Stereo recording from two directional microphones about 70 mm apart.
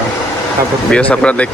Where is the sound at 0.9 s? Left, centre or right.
Centre.